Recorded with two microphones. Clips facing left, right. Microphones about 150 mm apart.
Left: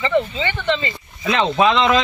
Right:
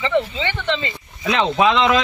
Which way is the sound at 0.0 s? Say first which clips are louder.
Left 1 dB; 5° left (ahead or behind).